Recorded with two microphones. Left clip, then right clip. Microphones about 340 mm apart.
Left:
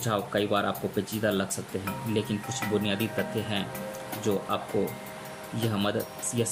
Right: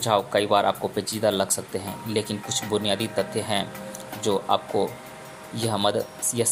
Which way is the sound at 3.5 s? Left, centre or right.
Centre.